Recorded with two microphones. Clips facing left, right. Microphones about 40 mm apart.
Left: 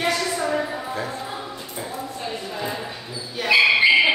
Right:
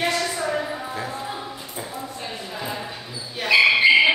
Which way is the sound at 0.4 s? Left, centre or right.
Centre.